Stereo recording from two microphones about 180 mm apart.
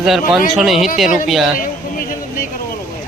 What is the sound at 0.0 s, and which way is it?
Speech, centre (ahead or behind).